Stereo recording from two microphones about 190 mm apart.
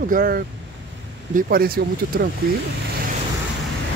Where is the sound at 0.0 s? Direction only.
50° right (ahead or behind).